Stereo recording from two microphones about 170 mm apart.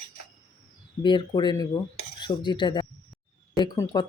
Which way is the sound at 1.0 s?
25° left (ahead or behind).